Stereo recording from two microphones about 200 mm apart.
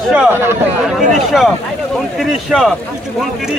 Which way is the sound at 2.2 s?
Centre (ahead or behind).